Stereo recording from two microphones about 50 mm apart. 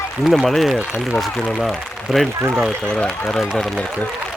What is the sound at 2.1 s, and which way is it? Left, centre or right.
Speech, centre.